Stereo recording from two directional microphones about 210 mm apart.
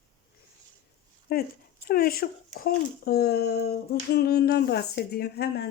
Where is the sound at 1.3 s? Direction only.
50° left (ahead or behind).